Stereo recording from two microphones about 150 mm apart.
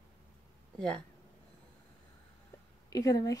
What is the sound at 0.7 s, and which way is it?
Speech, 5° left (ahead or behind).